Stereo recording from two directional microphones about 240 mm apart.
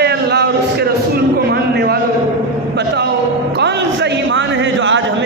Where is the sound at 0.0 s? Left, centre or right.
Right.